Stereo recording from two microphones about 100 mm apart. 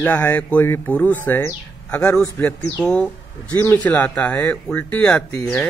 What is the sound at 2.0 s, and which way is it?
Speech, 15° left (ahead or behind).